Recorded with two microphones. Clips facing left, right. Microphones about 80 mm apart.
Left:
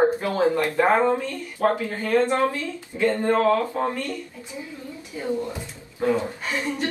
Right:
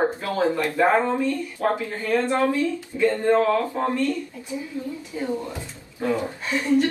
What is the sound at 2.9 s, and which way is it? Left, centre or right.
Speech, left.